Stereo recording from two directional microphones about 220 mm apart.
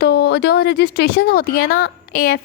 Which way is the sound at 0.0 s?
50° left (ahead or behind).